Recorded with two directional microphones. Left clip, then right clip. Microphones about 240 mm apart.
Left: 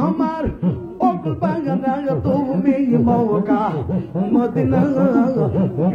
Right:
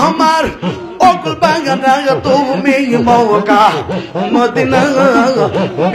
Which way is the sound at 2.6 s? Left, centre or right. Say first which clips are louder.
Right 6 dB; centre.